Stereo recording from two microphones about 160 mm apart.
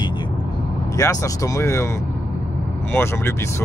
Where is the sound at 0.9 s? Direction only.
20° left (ahead or behind).